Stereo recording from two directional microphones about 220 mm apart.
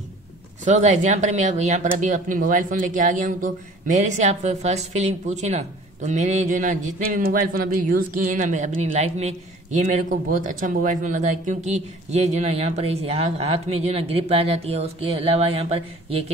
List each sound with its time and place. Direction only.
0.7 s speech: 30° right (ahead or behind)